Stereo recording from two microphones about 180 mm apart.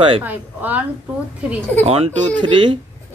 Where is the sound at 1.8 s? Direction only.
35° right (ahead or behind).